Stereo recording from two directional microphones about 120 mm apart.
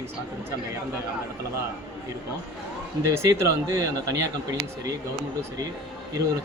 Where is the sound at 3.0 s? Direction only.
25° right (ahead or behind).